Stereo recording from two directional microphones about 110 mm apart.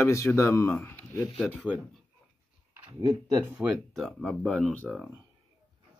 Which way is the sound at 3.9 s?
Centre (ahead or behind).